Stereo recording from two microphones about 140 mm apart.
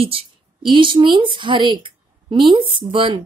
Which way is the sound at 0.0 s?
40° right (ahead or behind).